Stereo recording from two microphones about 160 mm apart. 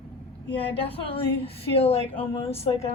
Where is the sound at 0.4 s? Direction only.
35° left (ahead or behind).